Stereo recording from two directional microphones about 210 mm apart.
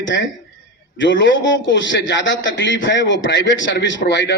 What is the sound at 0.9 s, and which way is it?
A man's voice, 60° left (ahead or behind).